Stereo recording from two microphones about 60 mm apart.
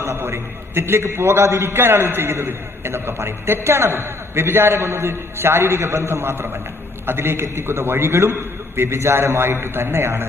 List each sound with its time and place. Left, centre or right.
0.0 s a man's voice: right